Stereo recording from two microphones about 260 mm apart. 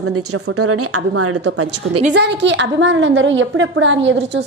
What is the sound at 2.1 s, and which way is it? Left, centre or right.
A woman's voice, right.